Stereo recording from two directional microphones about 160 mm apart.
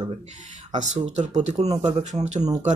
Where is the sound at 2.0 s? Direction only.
45° right (ahead or behind).